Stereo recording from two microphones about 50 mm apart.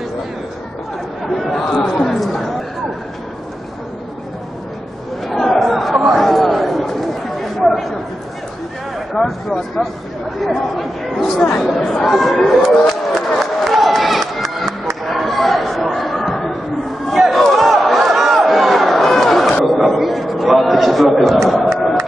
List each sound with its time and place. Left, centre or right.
1.2 s chatter: centre
5.3 s chatter: centre
9.2 s speech: centre
10.8 s speech: centre
13.4 s crowd: centre
15.0 s chatter: centre
17.1 s crowd: centre
19.6 s a sound: centre